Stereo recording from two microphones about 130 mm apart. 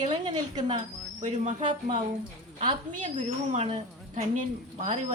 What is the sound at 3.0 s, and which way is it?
Speech, 60° right (ahead or behind).